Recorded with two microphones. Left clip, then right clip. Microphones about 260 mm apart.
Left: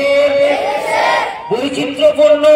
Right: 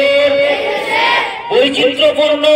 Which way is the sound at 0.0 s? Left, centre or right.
Left.